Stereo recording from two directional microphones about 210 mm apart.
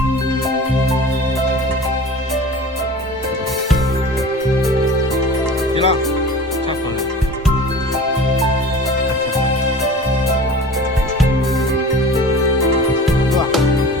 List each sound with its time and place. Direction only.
5.7 s music: 25° left (ahead or behind)
13.1 s music: centre (ahead or behind)